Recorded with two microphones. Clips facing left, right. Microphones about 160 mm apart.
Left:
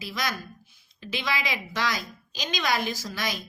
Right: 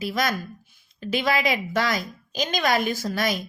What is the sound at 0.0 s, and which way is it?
A woman's voice, 50° right (ahead or behind).